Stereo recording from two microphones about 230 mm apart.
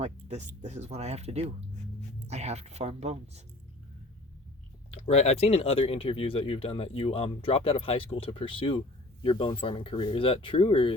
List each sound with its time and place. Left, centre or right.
0.0 s speech: right
4.9 s speech: left